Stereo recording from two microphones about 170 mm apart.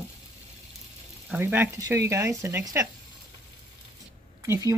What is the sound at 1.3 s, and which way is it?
Speech, 10° right (ahead or behind).